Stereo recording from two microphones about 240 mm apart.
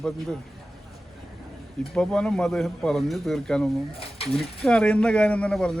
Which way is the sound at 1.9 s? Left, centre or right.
Centre.